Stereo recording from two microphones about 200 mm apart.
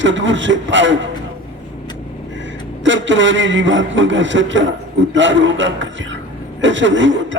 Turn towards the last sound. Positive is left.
turn(degrees=-65)  # may be behind; listen again after turning